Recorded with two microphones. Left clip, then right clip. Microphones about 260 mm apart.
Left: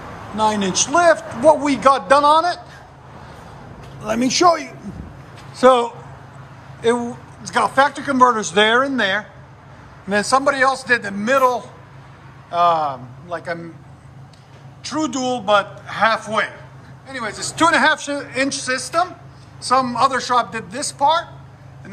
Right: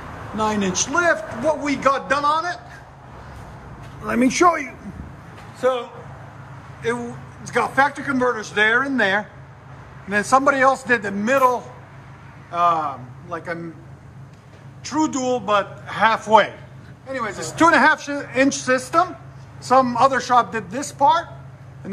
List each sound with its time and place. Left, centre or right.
0.4 s a woman's voice: centre
4.0 s speech: centre
5.6 s a man's voice: left; by 9.2 s centre
10.3 s a man's voice: centre
14.8 s speech: centre